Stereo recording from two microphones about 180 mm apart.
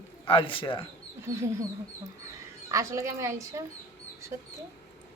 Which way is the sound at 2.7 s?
15° right (ahead or behind).